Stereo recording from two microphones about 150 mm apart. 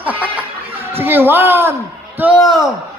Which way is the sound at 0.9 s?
15° right (ahead or behind).